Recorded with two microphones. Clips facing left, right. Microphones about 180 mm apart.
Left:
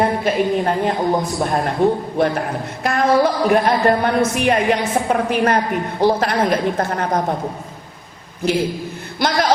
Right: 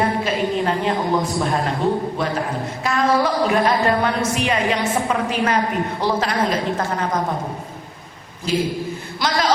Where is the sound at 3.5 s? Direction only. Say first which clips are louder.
Left 3 dB; 55° left (ahead or behind).